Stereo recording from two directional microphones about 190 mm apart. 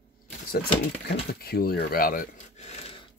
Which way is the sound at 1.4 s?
55° left (ahead or behind).